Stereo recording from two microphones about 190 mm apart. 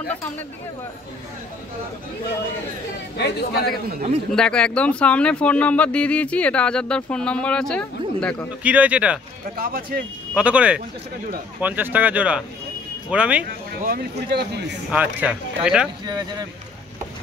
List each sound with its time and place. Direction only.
3.2 s a man's voice: 60° left (ahead or behind)
4.3 s speech: 5° left (ahead or behind)
8.6 s speech: 5° right (ahead or behind)
9.6 s speech: 50° right (ahead or behind)
10.3 s speech: 5° right (ahead or behind)
13.7 s speech: 50° right (ahead or behind)
14.9 s speech: 10° right (ahead or behind)
16.1 s speech: 20° right (ahead or behind)